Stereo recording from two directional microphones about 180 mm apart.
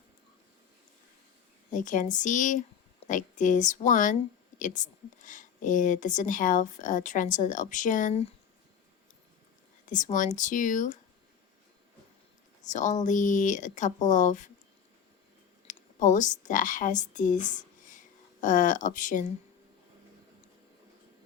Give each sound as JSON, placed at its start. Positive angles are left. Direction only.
{"t": 1.7, "sound": "a woman's voice", "side_deg": 45}
{"t": 9.8, "sound": "a woman's voice", "side_deg": 45}
{"t": 12.6, "sound": "a woman's voice", "side_deg": 40}
{"t": 15.6, "sound": "speech", "side_deg": 45}